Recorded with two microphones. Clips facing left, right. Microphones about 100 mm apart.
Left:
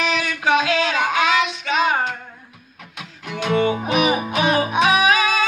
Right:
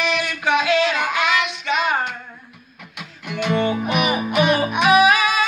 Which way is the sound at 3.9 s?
35° left (ahead or behind).